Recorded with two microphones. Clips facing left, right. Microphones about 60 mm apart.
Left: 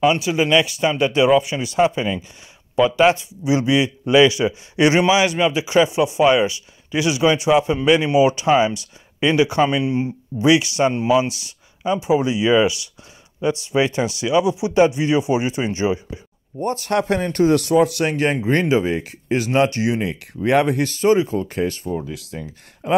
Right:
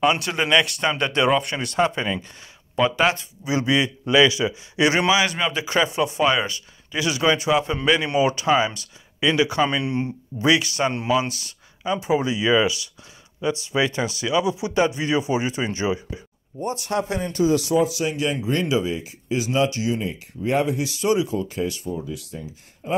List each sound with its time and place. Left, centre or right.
0.0 s speech: centre
3.2 s a man's voice: left
9.7 s speech: centre
10.4 s a man's voice: left
10.9 s speech: centre
11.3 s a sound: centre
12.1 s a man's voice: centre
16.6 s speech: left
16.9 s speech: left